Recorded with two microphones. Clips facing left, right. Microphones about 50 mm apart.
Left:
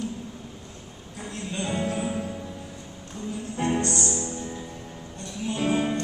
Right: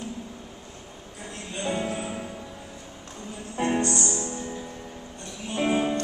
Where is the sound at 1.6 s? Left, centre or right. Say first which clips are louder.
Even; right.